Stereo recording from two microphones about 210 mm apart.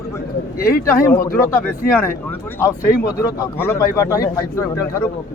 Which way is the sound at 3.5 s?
10° left (ahead or behind).